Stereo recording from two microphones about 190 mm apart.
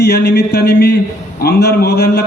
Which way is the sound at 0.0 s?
60° left (ahead or behind).